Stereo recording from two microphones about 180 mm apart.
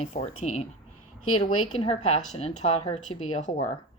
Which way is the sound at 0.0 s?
35° left (ahead or behind).